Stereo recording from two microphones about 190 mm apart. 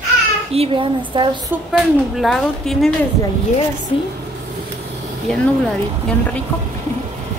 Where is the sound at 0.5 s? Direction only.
30° right (ahead or behind).